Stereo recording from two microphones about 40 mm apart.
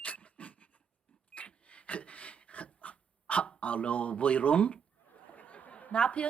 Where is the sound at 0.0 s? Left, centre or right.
Left.